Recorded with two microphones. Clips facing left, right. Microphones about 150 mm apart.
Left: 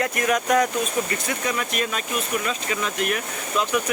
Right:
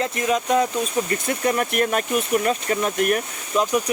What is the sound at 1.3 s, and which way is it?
Speech, 50° right (ahead or behind).